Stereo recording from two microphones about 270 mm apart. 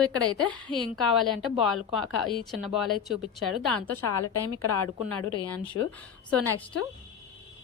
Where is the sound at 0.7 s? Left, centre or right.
Centre.